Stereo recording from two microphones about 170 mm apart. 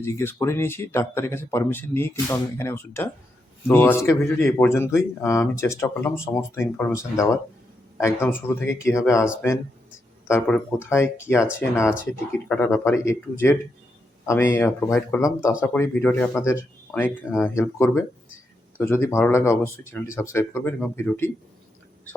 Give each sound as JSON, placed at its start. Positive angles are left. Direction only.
{"t": 0.0, "sound": "speech", "side_deg": 15}
{"t": 10.2, "sound": "speech", "side_deg": 10}